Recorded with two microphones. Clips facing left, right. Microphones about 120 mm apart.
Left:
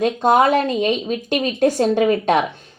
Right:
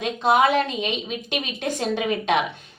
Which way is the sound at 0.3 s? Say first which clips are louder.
Left 3 dB; 45° left (ahead or behind).